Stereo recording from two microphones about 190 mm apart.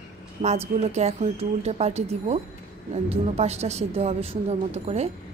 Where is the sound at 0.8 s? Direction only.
35° right (ahead or behind).